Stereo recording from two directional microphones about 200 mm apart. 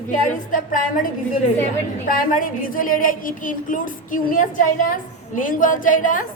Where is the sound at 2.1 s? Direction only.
45° left (ahead or behind).